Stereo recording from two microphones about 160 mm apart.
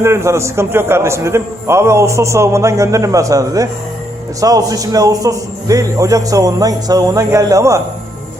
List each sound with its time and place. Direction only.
0.0 s a man's voice: 15° right (ahead or behind)